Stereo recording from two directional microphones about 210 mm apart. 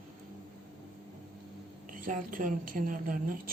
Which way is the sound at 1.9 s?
40° right (ahead or behind).